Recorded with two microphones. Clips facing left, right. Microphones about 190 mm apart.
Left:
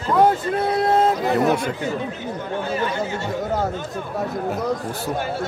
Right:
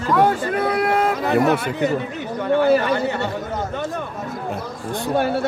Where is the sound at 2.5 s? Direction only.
65° right (ahead or behind).